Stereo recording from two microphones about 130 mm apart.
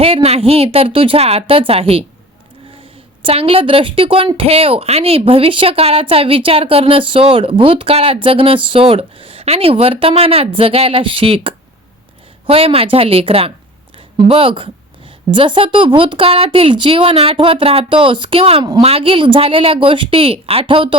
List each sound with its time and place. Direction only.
0.0 s speech: 50° right (ahead or behind)
3.2 s speech: 50° right (ahead or behind)